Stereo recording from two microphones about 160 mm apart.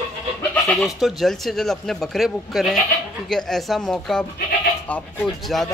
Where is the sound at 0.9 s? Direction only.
Centre (ahead or behind).